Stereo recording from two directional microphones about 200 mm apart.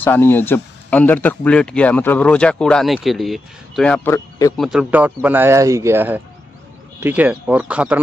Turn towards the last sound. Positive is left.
turn(degrees=-5)  # may be behind; listen again after turning